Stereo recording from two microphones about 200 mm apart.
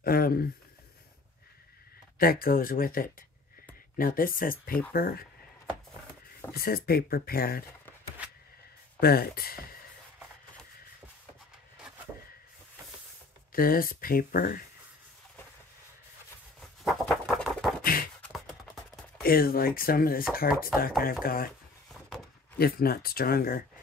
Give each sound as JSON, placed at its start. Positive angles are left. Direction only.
{"t": 0.0, "sound": "speech", "side_deg": 50}
{"t": 2.1, "sound": "speech", "side_deg": 45}
{"t": 6.5, "sound": "speech", "side_deg": 50}
{"t": 9.0, "sound": "speech", "side_deg": 50}
{"t": 13.5, "sound": "speech", "side_deg": 45}
{"t": 16.8, "sound": "a sound", "side_deg": 0}
{"t": 17.8, "sound": "beatboxing", "side_deg": 45}
{"t": 18.2, "sound": "beatboxing", "side_deg": 0}
{"t": 19.2, "sound": "speech", "side_deg": 50}
{"t": 22.6, "sound": "speech", "side_deg": 50}